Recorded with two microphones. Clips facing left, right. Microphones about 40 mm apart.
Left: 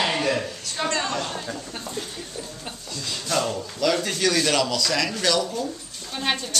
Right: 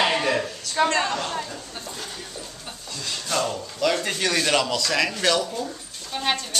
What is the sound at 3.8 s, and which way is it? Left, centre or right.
Speech, centre.